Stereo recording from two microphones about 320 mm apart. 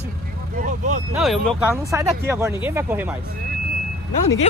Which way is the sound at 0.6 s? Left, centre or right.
Right.